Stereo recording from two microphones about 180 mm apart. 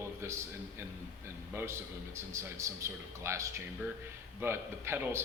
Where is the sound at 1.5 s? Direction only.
15° right (ahead or behind).